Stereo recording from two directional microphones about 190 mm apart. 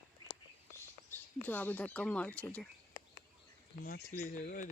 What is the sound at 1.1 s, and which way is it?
Speech, 10° left (ahead or behind).